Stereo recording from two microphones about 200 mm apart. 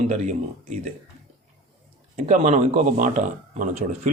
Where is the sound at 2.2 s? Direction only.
35° right (ahead or behind).